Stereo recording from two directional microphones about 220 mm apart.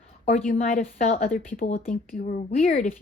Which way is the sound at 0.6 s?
30° left (ahead or behind).